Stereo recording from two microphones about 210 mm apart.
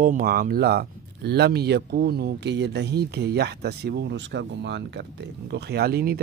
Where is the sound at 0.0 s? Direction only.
40° right (ahead or behind).